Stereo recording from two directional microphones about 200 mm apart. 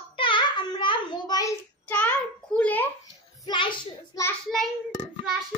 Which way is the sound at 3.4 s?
25° left (ahead or behind).